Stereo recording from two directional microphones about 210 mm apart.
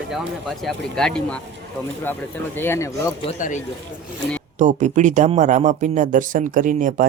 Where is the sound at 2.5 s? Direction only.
10° left (ahead or behind).